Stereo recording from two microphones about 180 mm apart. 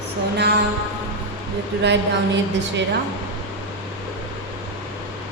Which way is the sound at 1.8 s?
75° right (ahead or behind).